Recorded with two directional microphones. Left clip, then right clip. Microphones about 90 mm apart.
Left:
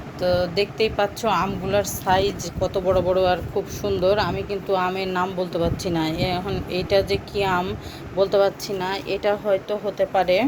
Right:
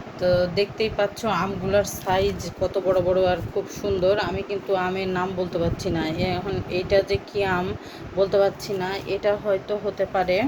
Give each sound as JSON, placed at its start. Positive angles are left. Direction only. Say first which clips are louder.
{"t": 0.2, "sound": "speech", "louder": "even", "side_deg": 30}
{"t": 2.6, "sound": "speech", "louder": "left 1 dB", "side_deg": 5}
{"t": 9.6, "sound": "speech", "louder": "left 2 dB", "side_deg": 5}